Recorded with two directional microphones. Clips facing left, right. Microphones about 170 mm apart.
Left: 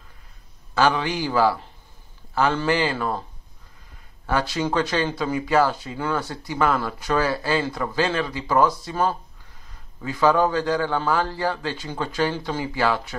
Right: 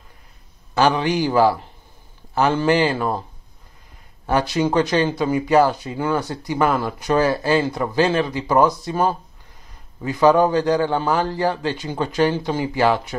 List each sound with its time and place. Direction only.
0.7 s speech: 20° right (ahead or behind)
4.3 s speech: 15° right (ahead or behind)